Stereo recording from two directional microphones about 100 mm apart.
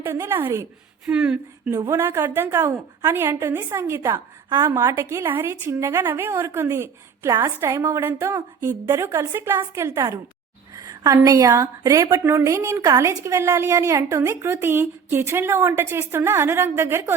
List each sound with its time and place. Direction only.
0.0 s a woman's voice: 25° right (ahead or behind)
1.0 s speech: 10° right (ahead or behind)
1.9 s a woman's voice: 25° right (ahead or behind)